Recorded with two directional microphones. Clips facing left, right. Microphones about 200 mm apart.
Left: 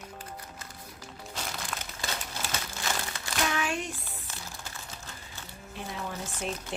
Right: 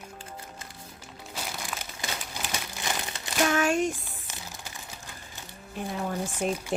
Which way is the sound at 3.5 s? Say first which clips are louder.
Right 7 dB; 45° right (ahead or behind).